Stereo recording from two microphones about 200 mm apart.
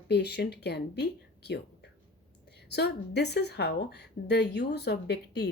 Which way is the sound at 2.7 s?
55° left (ahead or behind).